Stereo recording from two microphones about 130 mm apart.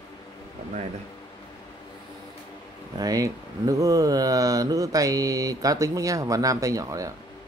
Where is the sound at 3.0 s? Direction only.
25° right (ahead or behind).